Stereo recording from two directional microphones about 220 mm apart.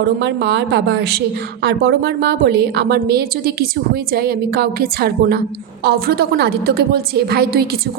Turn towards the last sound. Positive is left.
turn(degrees=-45)  # may be behind; listen again after turning